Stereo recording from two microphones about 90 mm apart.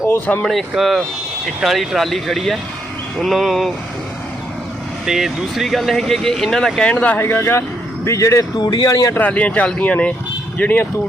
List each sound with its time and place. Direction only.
0.3 s speech: 10° left (ahead or behind)
0.8 s speech: centre (ahead or behind)
5.0 s speech: 5° right (ahead or behind)
6.9 s speech: 20° left (ahead or behind); by 8.4 s 35° left (ahead or behind)
8.5 s speech: 50° left (ahead or behind)
9.1 s speech: 15° left (ahead or behind)